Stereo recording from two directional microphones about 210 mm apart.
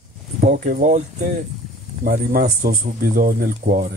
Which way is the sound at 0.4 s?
40° right (ahead or behind).